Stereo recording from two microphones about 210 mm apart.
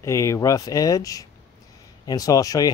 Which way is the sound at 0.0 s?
15° left (ahead or behind).